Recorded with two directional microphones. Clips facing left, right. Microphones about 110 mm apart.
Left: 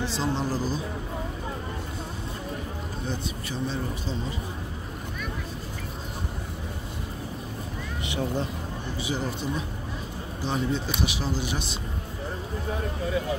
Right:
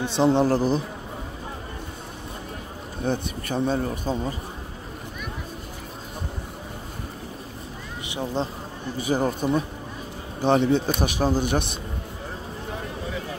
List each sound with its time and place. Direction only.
0.0 s a man's voice: 65° right (ahead or behind)
3.0 s speech: 55° right (ahead or behind)
8.1 s speech: 20° right (ahead or behind)
8.9 s speech: 45° right (ahead or behind)
10.4 s a man's voice: 60° right (ahead or behind)
11.0 s speech: 50° right (ahead or behind)